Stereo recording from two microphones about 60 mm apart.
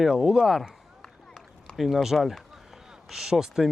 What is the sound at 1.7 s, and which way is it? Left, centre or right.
Speech, centre.